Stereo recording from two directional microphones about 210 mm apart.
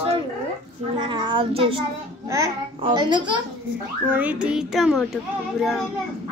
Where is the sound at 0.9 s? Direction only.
25° right (ahead or behind).